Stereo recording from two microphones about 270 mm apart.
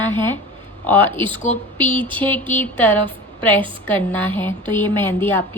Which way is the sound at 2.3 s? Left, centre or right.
Centre.